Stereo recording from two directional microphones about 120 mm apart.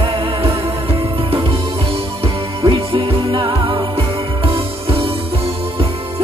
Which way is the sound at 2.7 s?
50° right (ahead or behind).